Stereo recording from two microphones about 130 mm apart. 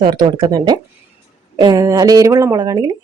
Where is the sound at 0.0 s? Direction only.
35° right (ahead or behind).